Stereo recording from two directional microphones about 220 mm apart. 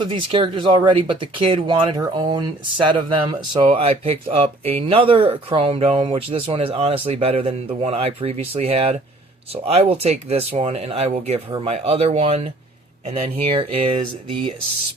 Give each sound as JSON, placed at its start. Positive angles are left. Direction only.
{"t": 0.0, "sound": "speech", "side_deg": -25}